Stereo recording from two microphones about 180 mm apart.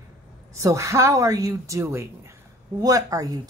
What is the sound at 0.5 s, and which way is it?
Speech, 15° right (ahead or behind).